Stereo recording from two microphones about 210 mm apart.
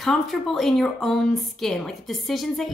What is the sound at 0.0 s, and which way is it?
A woman's voice, centre (ahead or behind).